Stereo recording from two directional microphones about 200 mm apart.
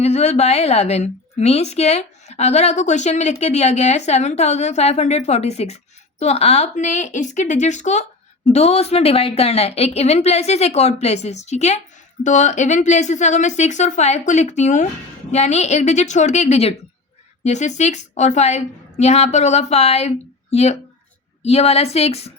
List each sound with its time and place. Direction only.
0.0 s a woman's voice: 35° left (ahead or behind)